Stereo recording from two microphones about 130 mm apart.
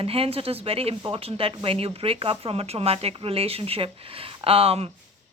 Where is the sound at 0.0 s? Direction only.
45° right (ahead or behind).